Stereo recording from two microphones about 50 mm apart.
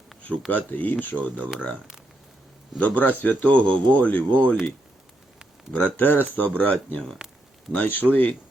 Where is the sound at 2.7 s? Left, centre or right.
Left.